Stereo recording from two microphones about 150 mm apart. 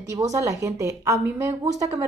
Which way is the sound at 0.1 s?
20° right (ahead or behind).